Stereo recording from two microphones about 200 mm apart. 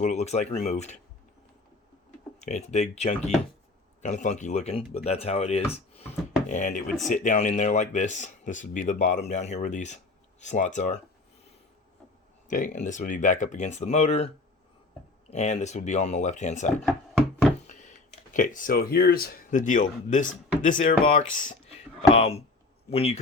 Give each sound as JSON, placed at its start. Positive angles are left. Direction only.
{"t": 0.0, "sound": "speech", "side_deg": 35}
{"t": 2.4, "sound": "speech", "side_deg": 35}
{"t": 12.5, "sound": "speech", "side_deg": 40}
{"t": 15.3, "sound": "speech", "side_deg": 35}
{"t": 16.8, "sound": "a sound", "side_deg": 0}
{"t": 17.7, "sound": "a sound", "side_deg": 35}
{"t": 18.3, "sound": "speech", "side_deg": 40}
{"t": 22.1, "sound": "speech", "side_deg": 30}